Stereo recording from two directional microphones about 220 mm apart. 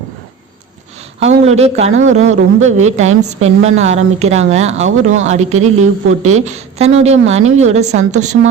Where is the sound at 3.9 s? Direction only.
30° right (ahead or behind).